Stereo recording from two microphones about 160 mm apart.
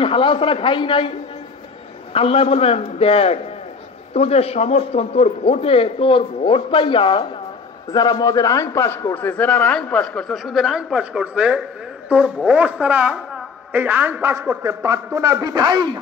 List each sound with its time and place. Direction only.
0.0 s a man's voice: 30° left (ahead or behind)
2.1 s a man's voice: 35° left (ahead or behind); by 15.9 s 25° right (ahead or behind)